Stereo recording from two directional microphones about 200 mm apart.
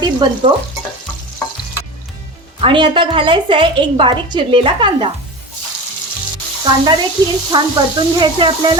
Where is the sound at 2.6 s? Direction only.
25° right (ahead or behind).